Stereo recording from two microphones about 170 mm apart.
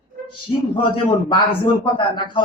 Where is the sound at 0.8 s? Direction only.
30° left (ahead or behind).